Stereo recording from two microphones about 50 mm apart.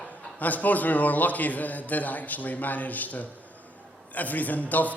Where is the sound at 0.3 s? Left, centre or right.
Left.